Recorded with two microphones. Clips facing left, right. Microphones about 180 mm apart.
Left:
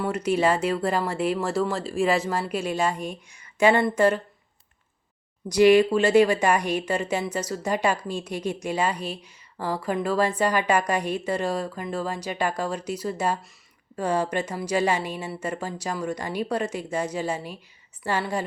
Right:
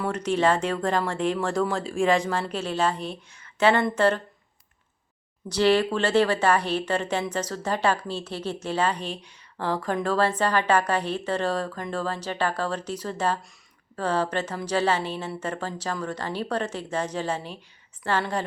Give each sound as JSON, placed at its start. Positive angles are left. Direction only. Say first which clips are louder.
{"t": 0.0, "sound": "speech", "louder": "left 1 dB", "side_deg": 10}
{"t": 5.5, "sound": "speech", "louder": "left 5 dB", "side_deg": 10}